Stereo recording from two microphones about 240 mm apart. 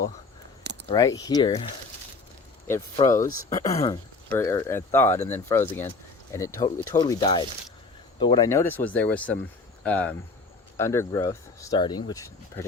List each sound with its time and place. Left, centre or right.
0.6 s a sound: right
0.9 s speech: centre
3.2 s speech: left
3.6 s speech: centre